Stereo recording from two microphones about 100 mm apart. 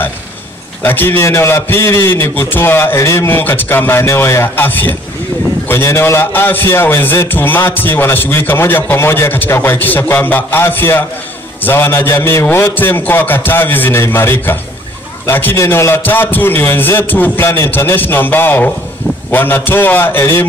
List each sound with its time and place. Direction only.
0.8 s a man's voice: 20° left (ahead or behind)